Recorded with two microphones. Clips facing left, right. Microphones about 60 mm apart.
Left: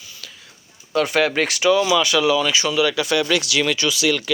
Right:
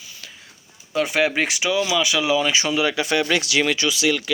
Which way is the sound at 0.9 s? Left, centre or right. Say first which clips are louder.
Left 2 dB; centre.